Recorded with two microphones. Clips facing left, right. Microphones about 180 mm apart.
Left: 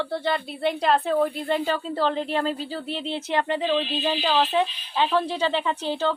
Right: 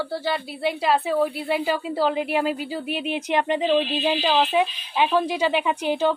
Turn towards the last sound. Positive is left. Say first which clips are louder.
# right 3 dB
turn(degrees=-15)  # may be behind; listen again after turning